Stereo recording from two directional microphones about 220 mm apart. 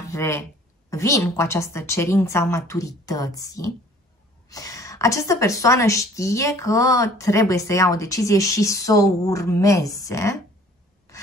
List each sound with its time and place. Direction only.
0.1 s a woman's voice: 10° left (ahead or behind)